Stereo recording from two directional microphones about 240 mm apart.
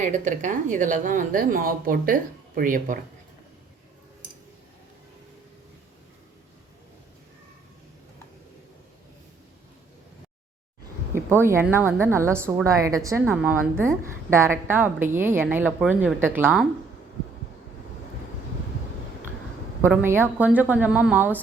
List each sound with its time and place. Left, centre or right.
0.0 s speech: right
11.1 s a woman's voice: centre
19.8 s a woman's voice: centre